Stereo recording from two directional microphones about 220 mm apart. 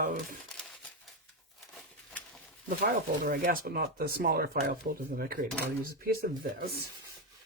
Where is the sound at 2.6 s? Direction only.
40° right (ahead or behind).